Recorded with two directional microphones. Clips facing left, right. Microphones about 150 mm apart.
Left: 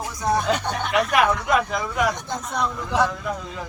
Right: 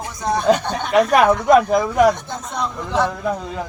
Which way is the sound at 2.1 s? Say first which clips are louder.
Even; 15° left (ahead or behind).